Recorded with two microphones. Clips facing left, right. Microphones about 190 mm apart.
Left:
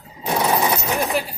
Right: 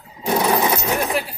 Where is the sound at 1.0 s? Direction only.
Centre (ahead or behind).